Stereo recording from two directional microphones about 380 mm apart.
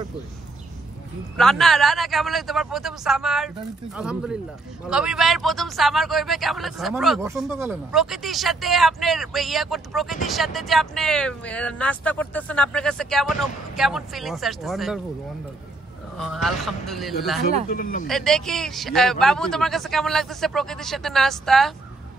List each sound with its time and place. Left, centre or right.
1.3 s speech: centre
16.2 s speech: centre
17.6 s speech: left
18.0 s speech: centre